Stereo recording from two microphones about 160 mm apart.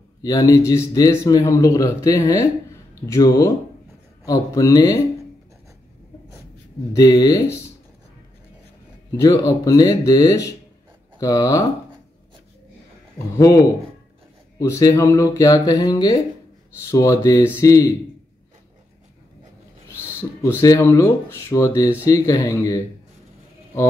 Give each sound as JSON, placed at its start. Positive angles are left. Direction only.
{"t": 0.2, "sound": "a man's voice", "side_deg": 20}
{"t": 7.0, "sound": "a man's voice", "side_deg": 20}
{"t": 9.1, "sound": "a man's voice", "side_deg": 20}
{"t": 14.6, "sound": "a man's voice", "side_deg": 20}
{"t": 19.9, "sound": "speech", "side_deg": 15}